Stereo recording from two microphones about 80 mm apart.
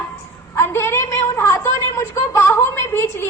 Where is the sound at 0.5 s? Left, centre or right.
Left.